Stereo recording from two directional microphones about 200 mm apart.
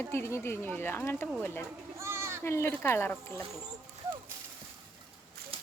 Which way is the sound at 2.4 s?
10° left (ahead or behind).